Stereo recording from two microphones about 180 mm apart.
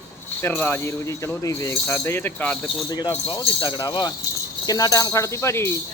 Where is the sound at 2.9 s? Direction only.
25° left (ahead or behind).